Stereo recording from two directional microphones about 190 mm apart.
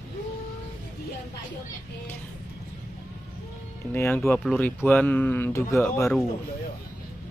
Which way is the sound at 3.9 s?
10° left (ahead or behind).